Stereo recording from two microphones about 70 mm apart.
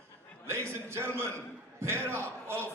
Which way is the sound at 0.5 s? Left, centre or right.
Right.